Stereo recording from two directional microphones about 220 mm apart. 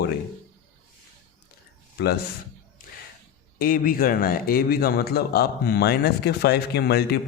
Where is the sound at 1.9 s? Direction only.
45° left (ahead or behind).